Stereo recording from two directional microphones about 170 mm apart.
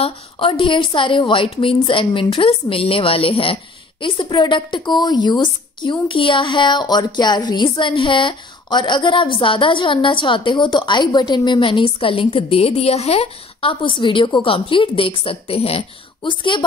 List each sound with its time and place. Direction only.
0.0 s a woman's voice: 30° left (ahead or behind)